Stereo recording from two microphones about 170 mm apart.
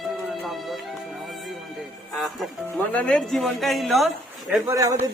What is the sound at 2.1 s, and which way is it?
Speech, centre (ahead or behind).